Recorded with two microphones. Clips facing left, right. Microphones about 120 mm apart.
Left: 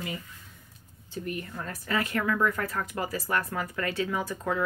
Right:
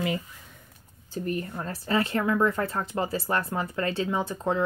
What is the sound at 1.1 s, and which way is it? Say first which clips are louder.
A woman's voice: right 4 dB; 35° right (ahead or behind).